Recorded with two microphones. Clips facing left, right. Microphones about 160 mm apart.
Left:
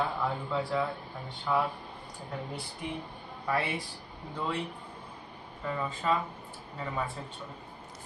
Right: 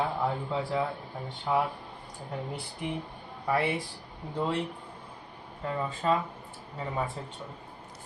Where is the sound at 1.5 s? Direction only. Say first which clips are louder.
Right 1 dB; 20° right (ahead or behind).